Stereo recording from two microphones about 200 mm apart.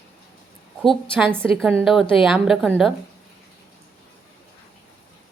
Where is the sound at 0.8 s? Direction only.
Centre (ahead or behind).